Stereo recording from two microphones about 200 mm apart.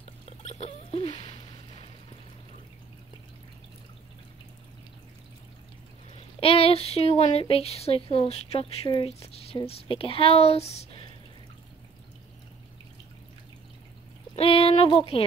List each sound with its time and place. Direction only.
0.0 s rodents: 35° left (ahead or behind)
6.1 s speech: 30° left (ahead or behind)
14.3 s speech: 30° left (ahead or behind)